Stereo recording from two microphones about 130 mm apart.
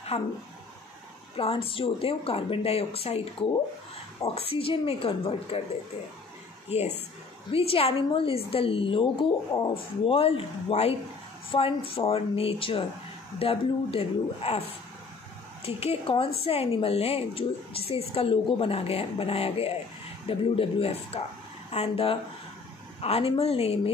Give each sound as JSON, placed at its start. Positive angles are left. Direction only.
{"t": 0.1, "sound": "a woman's voice", "side_deg": 50}
{"t": 1.3, "sound": "a woman's voice", "side_deg": 45}
{"t": 6.7, "sound": "a woman's voice", "side_deg": 55}